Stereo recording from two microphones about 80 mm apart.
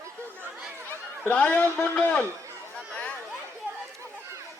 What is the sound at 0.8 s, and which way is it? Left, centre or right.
A man's voice, left.